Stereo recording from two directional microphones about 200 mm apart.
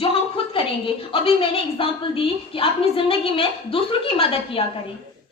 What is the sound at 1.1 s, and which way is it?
A woman's voice, 25° left (ahead or behind).